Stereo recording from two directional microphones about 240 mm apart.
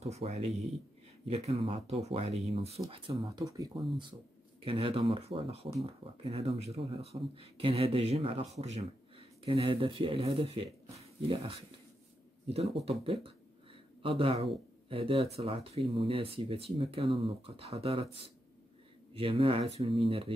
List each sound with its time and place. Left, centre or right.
0.0 s speech: right
3.3 s speech: centre
19.1 s speech: right